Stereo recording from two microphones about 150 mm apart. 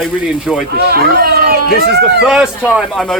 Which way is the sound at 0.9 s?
90° right.